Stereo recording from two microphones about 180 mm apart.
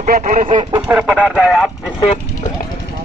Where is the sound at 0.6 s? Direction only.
25° right (ahead or behind).